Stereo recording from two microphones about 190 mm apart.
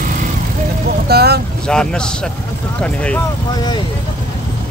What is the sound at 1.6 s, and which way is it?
A man's voice, 5° left (ahead or behind).